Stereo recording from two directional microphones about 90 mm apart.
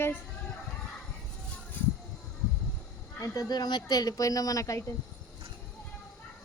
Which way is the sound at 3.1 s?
40° left (ahead or behind).